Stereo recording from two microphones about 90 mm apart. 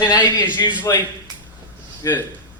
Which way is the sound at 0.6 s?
40° left (ahead or behind).